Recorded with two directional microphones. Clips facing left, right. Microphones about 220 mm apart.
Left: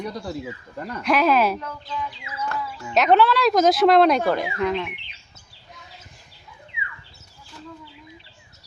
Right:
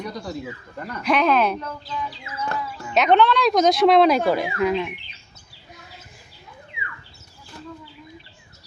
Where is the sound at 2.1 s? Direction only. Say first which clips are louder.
Right 1 dB; 35° right (ahead or behind).